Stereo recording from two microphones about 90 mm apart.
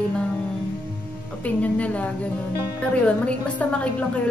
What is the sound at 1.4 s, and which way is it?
A woman's voice, 15° left (ahead or behind).